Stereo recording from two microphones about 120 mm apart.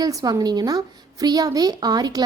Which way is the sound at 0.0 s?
30° right (ahead or behind).